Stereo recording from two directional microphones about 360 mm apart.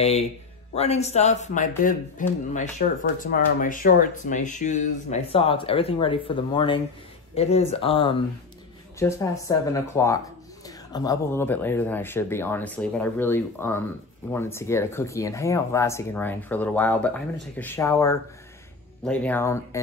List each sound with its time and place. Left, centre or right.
0.7 s speech: centre